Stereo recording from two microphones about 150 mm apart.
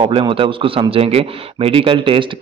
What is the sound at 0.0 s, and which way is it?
A man's voice, 35° right (ahead or behind).